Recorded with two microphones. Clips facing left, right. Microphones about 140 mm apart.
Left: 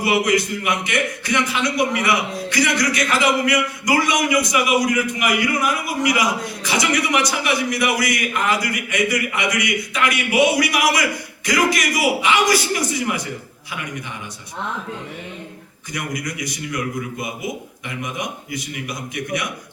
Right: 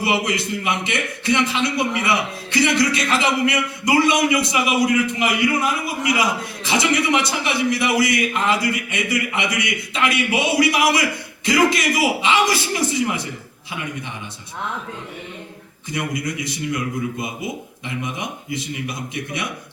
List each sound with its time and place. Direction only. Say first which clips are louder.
0.0 s a man's voice: left 3 dB; 25° right (ahead or behind)
15.9 s a man's voice: right 2 dB; 25° right (ahead or behind)